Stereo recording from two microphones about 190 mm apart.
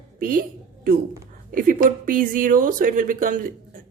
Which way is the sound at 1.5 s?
45° right (ahead or behind).